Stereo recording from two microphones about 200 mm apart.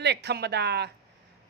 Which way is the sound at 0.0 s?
60° right (ahead or behind).